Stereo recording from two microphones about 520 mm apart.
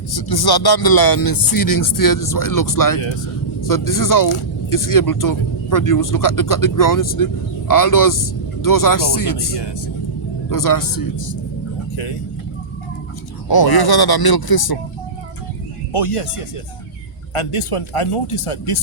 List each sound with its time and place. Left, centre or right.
0.1 s speech: left
13.5 s speech: left
15.9 s speech: left
17.3 s speech: left